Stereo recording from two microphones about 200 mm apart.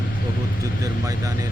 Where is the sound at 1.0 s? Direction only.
15° right (ahead or behind).